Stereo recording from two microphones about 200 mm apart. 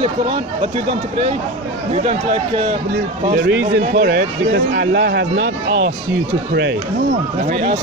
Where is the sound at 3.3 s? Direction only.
55° right (ahead or behind).